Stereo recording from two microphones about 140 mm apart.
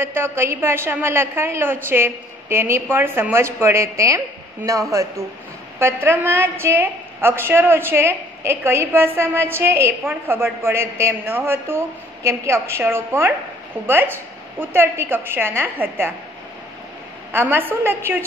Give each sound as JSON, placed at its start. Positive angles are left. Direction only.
{"t": 0.0, "sound": "a woman's voice", "side_deg": -15}
{"t": 5.8, "sound": "a woman's voice", "side_deg": -15}
{"t": 17.3, "sound": "a woman's voice", "side_deg": -15}